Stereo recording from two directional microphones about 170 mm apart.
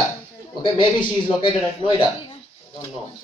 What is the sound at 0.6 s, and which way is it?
A man's voice, 30° left (ahead or behind).